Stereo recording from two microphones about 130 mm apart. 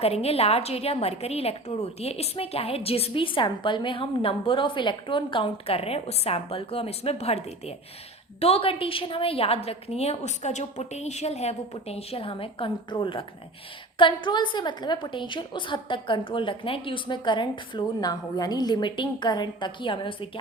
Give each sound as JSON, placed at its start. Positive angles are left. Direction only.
{"t": 0.0, "sound": "a woman's voice", "side_deg": 50}